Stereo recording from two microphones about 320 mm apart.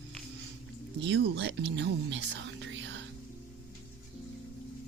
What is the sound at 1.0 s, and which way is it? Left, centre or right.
Speech, right.